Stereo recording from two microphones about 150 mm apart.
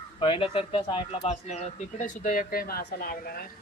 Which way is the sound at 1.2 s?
45° left (ahead or behind).